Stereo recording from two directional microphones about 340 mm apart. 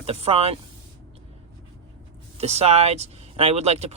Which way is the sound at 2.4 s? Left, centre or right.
Centre.